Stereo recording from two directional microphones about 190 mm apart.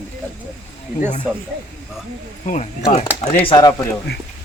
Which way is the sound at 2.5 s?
35° left (ahead or behind).